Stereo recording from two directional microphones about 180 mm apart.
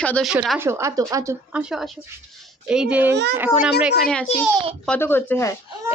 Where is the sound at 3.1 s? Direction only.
70° right (ahead or behind).